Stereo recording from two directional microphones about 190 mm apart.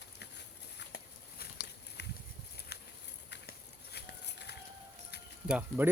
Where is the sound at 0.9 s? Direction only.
55° left (ahead or behind).